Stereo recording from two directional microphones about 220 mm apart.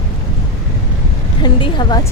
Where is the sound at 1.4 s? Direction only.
20° left (ahead or behind).